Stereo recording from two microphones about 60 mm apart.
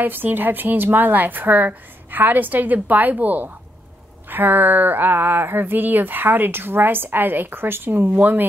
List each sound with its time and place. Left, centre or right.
0.0 s speech: right